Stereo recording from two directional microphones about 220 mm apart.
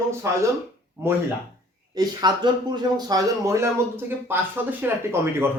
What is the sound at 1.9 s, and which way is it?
Speech, 20° right (ahead or behind).